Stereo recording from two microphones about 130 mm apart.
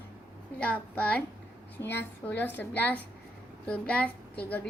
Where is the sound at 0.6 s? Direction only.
10° left (ahead or behind).